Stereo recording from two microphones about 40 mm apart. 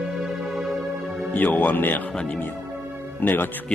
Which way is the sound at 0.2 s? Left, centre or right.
Centre.